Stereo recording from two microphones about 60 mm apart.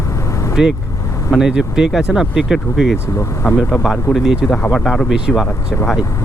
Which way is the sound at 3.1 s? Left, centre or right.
Left.